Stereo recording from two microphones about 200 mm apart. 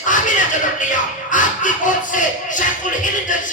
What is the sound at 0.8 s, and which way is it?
Music, 40° left (ahead or behind).